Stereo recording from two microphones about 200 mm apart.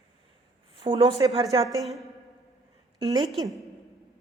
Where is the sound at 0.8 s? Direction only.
25° right (ahead or behind).